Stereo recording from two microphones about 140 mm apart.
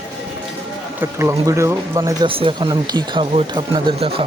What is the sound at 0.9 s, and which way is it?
Speech, 20° right (ahead or behind).